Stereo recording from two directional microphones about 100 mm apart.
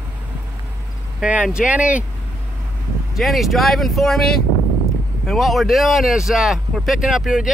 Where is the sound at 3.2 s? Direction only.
Centre (ahead or behind).